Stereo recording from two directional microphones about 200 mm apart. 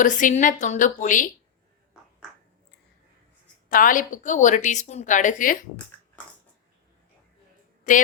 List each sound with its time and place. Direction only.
0.0 s a woman's voice: 40° left (ahead or behind)
3.7 s a woman's voice: 45° left (ahead or behind)
7.9 s a woman's voice: 40° left (ahead or behind)